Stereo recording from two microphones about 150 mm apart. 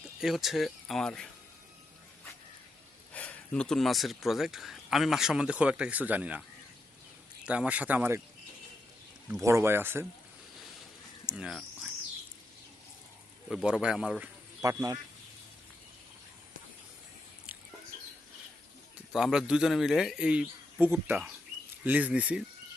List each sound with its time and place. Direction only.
0.2 s speech: centre (ahead or behind)
3.1 s speech: 10° left (ahead or behind); by 6.4 s 10° right (ahead or behind)
7.4 s speech: 10° right (ahead or behind)
9.4 s speech: 20° right (ahead or behind)
11.3 s speech: 5° right (ahead or behind)
13.5 s speech: 5° right (ahead or behind)
14.6 s speech: 20° right (ahead or behind)
18.9 s speech: 5° right (ahead or behind)